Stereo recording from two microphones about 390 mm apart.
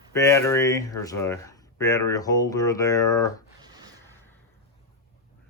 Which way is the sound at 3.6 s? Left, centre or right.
Centre.